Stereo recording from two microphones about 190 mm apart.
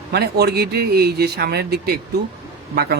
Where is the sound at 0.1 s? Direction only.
60° right (ahead or behind).